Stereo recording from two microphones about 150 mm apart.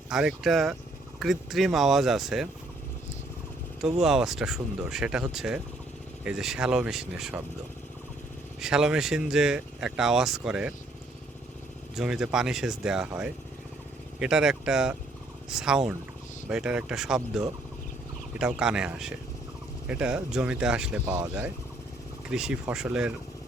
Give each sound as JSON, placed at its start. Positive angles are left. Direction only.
{"t": 0.1, "sound": "speech", "side_deg": -5}
{"t": 4.0, "sound": "speech", "side_deg": -5}
{"t": 8.6, "sound": "speech", "side_deg": -5}
{"t": 11.9, "sound": "speech", "side_deg": -5}
{"t": 22.3, "sound": "speech", "side_deg": -5}